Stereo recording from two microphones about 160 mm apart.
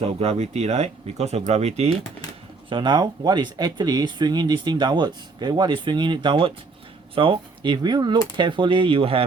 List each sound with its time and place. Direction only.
0.0 s speech: 40° right (ahead or behind)
2.6 s speech: 30° right (ahead or behind)